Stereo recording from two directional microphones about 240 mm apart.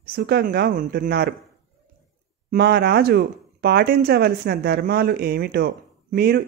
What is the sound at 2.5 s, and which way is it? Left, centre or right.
Speech, right.